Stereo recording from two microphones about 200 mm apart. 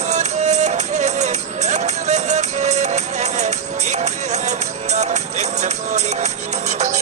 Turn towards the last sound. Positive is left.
turn(degrees=-35)  # may be behind; listen again after turning